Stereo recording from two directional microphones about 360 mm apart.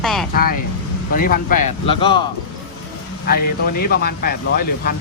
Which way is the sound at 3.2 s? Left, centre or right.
Left.